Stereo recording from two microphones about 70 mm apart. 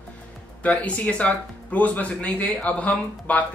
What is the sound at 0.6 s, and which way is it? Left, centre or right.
A man's voice, centre.